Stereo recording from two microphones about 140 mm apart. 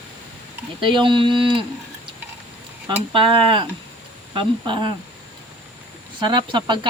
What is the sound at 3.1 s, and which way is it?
Speech, 35° right (ahead or behind).